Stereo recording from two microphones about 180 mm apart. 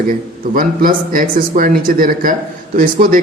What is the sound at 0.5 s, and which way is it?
Speech, 50° right (ahead or behind).